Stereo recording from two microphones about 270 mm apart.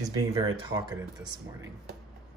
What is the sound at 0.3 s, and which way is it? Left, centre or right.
Speech, centre.